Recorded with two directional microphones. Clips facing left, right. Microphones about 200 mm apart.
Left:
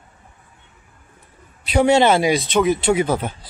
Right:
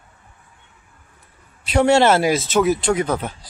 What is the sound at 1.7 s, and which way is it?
Speech, centre (ahead or behind).